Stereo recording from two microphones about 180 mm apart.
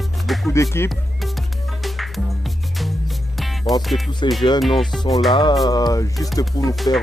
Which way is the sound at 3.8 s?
Centre (ahead or behind).